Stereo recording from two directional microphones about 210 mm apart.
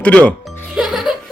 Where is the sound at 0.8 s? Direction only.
Centre (ahead or behind).